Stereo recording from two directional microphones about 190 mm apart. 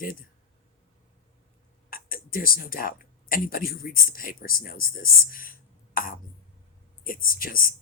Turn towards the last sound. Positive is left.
turn(degrees=50)  # may be behind; listen again after turning